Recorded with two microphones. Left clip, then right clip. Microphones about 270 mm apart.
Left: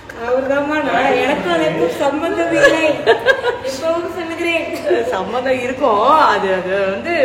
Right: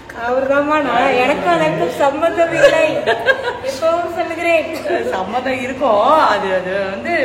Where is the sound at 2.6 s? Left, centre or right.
Centre.